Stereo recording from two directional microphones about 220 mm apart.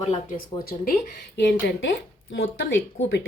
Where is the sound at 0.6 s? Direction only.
45° left (ahead or behind).